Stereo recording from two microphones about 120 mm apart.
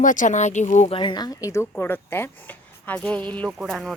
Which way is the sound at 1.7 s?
15° left (ahead or behind).